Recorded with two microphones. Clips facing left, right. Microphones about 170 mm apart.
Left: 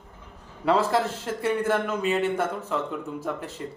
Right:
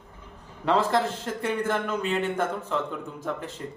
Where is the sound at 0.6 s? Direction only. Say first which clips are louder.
Left 1 dB; 5° left (ahead or behind).